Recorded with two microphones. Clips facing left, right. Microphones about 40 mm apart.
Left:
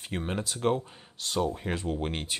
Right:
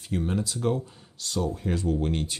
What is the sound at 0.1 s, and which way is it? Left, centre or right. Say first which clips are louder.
Speech: right 4 dB; left.